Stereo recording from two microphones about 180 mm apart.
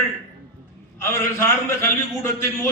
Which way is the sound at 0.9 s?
15° left (ahead or behind).